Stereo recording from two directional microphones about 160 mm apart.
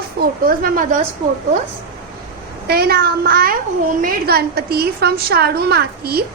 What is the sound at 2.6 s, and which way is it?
A child's voice, 75° right (ahead or behind).